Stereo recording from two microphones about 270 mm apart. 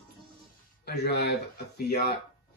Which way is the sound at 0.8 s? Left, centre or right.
Left.